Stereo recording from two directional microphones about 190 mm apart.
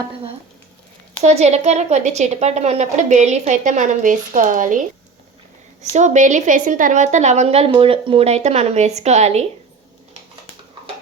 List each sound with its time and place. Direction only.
1.2 s a woman's voice: 35° right (ahead or behind)
5.8 s a woman's voice: 40° right (ahead or behind)